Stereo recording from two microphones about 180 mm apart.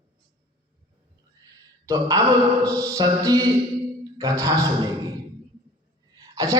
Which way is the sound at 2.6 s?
20° right (ahead or behind).